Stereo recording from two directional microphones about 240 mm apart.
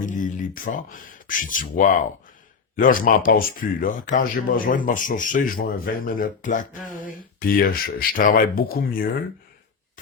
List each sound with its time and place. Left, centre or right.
0.0 s speech: left